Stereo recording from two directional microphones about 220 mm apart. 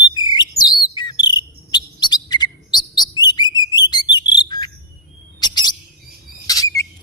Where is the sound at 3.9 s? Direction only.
20° left (ahead or behind).